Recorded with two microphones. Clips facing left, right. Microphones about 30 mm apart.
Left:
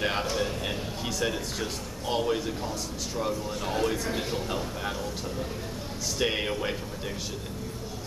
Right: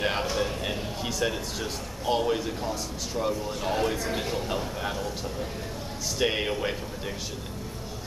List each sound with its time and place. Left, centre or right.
0.0 s a sound: centre
3.2 s speech: centre
6.1 s speech: centre